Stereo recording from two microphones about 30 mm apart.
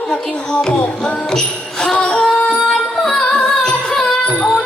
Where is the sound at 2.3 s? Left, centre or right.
Left.